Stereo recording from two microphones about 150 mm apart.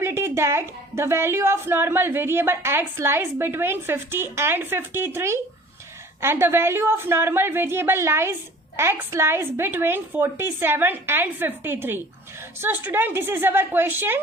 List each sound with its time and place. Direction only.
0.0 s a woman's voice: 15° right (ahead or behind)